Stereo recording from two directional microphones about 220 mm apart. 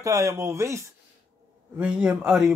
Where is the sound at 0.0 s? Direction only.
15° right (ahead or behind).